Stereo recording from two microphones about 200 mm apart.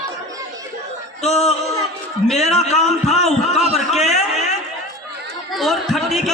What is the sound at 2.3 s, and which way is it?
A man's voice, 35° left (ahead or behind).